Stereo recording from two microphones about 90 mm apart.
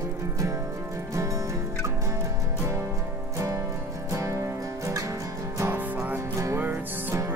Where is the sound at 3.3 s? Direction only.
35° right (ahead or behind).